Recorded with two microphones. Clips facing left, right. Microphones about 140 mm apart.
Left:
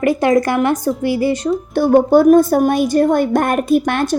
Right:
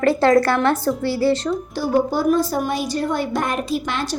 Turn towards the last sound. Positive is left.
turn(degrees=55)  # may be behind; listen again after turning